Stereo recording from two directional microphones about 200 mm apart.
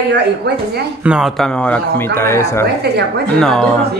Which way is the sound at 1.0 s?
5° right (ahead or behind).